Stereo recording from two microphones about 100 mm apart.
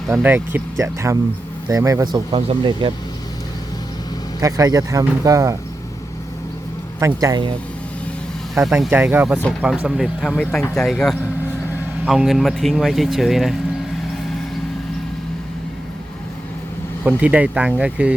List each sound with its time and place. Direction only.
0.2 s speech: 20° right (ahead or behind)
0.8 s speech: 30° right (ahead or behind)
2.3 s speech: 65° right (ahead or behind)
4.4 s speech: 35° right (ahead or behind)
7.0 s speech: 35° right (ahead or behind)
8.6 s speech: 30° right (ahead or behind)
8.9 s speech: 20° right (ahead or behind); by 13.6 s centre (ahead or behind)
17.0 s speech: 10° right (ahead or behind)